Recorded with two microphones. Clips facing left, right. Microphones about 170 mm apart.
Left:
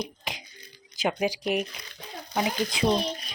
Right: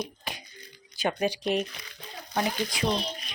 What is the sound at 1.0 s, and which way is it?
Speech, 10° left (ahead or behind).